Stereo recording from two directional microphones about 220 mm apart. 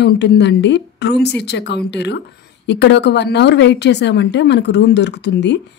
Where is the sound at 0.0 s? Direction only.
50° left (ahead or behind).